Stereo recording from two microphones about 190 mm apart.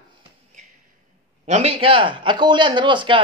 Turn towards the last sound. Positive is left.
turn(degrees=-25)  # may be behind; listen again after turning